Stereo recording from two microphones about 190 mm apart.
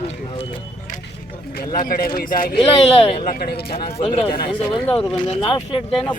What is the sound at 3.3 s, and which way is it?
Speech, 55° left (ahead or behind).